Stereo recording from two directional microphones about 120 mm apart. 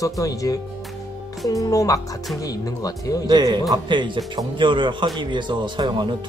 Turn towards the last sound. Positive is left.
turn(degrees=-40)  # may be behind; listen again after turning